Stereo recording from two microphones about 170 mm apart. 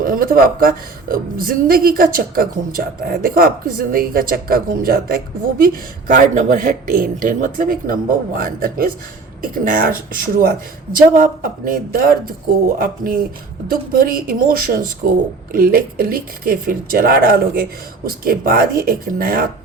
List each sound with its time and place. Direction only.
0.0 s a woman's voice: 55° right (ahead or behind)
13.7 s a woman's voice: 55° right (ahead or behind)